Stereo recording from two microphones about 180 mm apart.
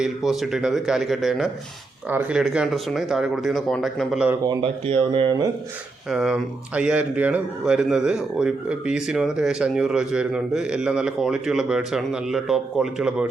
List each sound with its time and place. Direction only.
0.0 s speech: centre (ahead or behind)
4.4 s speech: 25° right (ahead or behind)
6.1 s speech: 5° right (ahead or behind)